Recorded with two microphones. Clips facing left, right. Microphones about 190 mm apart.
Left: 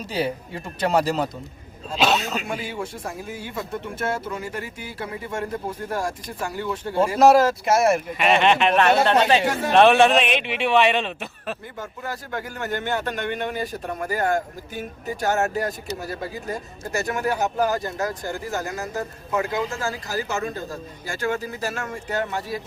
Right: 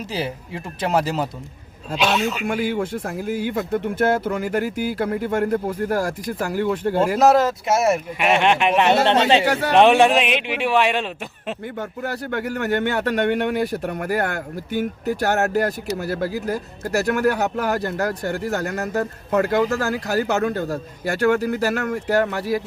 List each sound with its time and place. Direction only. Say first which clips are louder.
0.1 s speech: left 4 dB; centre (ahead or behind)
2.4 s speech: right 7 dB; 60° right (ahead or behind)
7.2 s speech: left 3 dB; centre (ahead or behind)
8.2 s speech: even; 10° right (ahead or behind)
9.5 s speech: right 3 dB; 70° right (ahead or behind)
9.7 s speech: right 1 dB; 15° right (ahead or behind)
11.8 s speech: right 5 dB; 65° right (ahead or behind)